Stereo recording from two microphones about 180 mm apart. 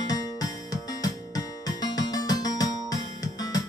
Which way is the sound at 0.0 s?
20° left (ahead or behind).